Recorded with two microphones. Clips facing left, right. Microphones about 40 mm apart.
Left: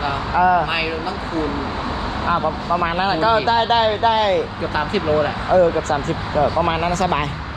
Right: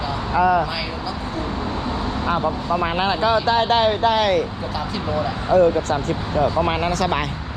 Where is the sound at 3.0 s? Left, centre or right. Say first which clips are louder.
Left 2 dB; left.